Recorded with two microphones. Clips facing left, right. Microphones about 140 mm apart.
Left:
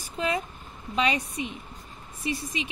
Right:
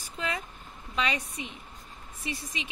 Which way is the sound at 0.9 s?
20° left (ahead or behind).